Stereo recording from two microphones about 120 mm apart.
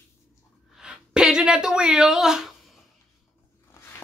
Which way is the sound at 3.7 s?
20° left (ahead or behind).